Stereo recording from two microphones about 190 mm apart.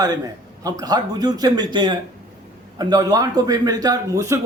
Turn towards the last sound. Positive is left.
turn(degrees=-15)  # may be behind; listen again after turning